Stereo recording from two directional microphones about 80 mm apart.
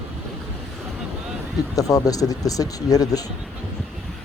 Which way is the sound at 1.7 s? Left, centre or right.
Left.